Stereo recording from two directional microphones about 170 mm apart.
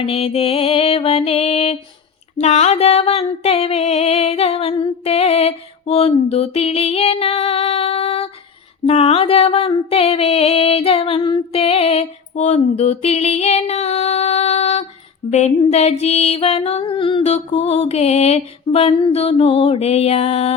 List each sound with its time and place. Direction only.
0.0 s music: 35° left (ahead or behind)
12.3 s female singing: 40° left (ahead or behind)
15.3 s music: 40° left (ahead or behind)